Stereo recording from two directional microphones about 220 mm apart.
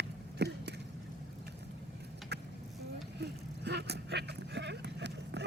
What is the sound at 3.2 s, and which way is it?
Vehicle, 50° right (ahead or behind).